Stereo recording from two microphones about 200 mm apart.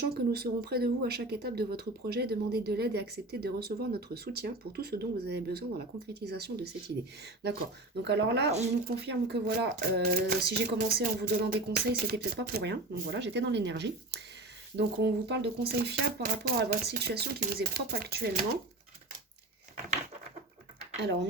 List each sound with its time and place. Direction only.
0.1 s speech: 50° right (ahead or behind)
20.9 s speech: 60° right (ahead or behind)